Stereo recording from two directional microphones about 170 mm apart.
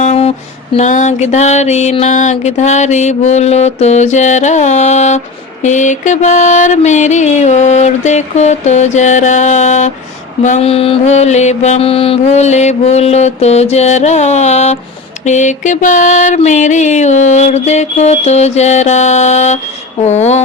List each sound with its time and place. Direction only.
0.0 s mantra: 40° left (ahead or behind)